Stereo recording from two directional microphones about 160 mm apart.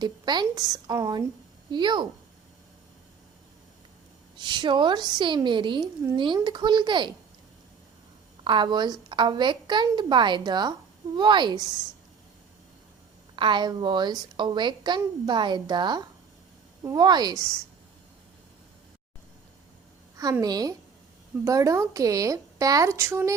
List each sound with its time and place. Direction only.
0.0 s a woman's voice: 25° right (ahead or behind)
4.4 s a woman's voice: 30° right (ahead or behind)
8.4 s a woman's voice: 30° right (ahead or behind)
13.3 s a woman's voice: 30° right (ahead or behind)
20.4 s a woman's voice: 25° right (ahead or behind)